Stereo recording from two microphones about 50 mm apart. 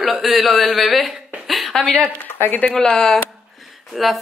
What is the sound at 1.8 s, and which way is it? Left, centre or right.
Speech, left.